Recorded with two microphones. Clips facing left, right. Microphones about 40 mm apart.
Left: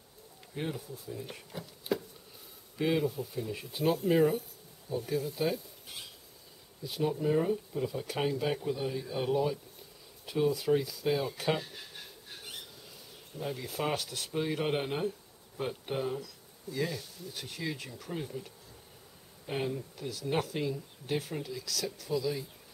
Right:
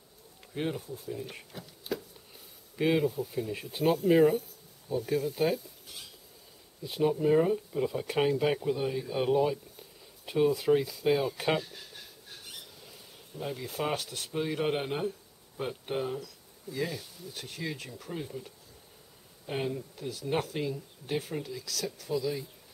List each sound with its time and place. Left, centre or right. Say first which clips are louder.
0.6 s speech: right 3 dB; centre
1.5 s chopping: left 5 dB; centre
2.8 s speech: right 3 dB; centre
6.8 s speech: right 4 dB; centre
13.4 s speech: right 1 dB; centre